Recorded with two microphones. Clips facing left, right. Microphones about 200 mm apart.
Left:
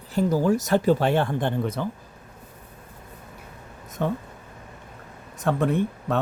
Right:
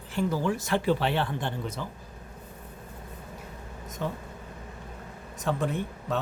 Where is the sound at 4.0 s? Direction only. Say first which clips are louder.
Left 7 dB; 60° left (ahead or behind).